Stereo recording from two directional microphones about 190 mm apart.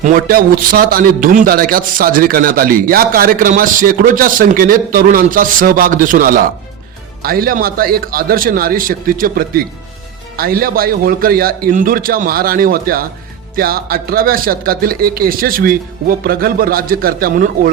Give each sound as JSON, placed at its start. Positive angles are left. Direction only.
{"t": 0.0, "sound": "a man's voice", "side_deg": -50}